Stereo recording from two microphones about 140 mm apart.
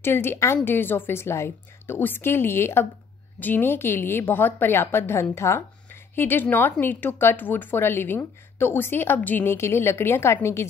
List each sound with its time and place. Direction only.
0.0 s a woman's voice: 15° left (ahead or behind)